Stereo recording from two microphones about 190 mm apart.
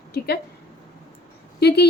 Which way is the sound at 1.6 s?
60° left (ahead or behind).